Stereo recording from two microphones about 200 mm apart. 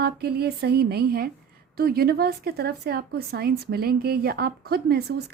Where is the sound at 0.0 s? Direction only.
50° right (ahead or behind).